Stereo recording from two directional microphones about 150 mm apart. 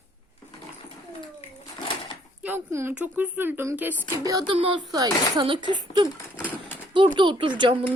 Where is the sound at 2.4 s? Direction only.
15° right (ahead or behind).